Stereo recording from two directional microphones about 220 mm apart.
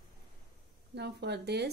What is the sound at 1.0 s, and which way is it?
Speech, 50° right (ahead or behind).